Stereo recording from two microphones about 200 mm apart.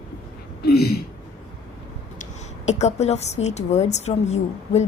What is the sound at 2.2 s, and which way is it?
A woman's voice, 35° left (ahead or behind).